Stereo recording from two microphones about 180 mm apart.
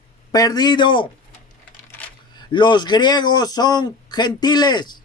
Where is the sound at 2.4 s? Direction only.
25° left (ahead or behind).